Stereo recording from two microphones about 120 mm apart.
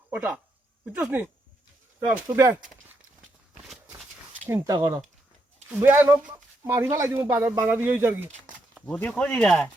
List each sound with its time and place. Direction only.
0.1 s speech: 10° right (ahead or behind)
4.6 s speech: 30° right (ahead or behind)
5.8 s speech: 15° right (ahead or behind)
8.7 s speech: 10° left (ahead or behind)